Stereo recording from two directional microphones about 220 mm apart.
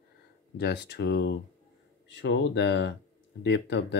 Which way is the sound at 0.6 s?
50° left (ahead or behind).